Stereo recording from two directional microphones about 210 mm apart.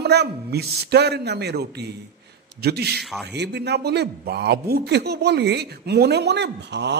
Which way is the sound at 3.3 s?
55° right (ahead or behind).